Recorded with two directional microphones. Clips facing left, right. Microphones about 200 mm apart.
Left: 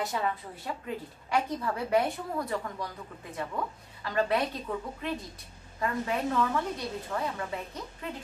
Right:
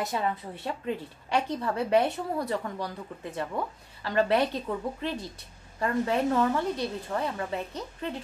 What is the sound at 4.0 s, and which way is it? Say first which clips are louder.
Speech: right 3 dB; 30° right (ahead or behind).